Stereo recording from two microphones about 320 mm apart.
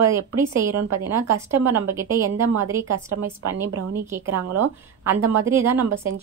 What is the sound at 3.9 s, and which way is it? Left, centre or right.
A woman's voice, centre.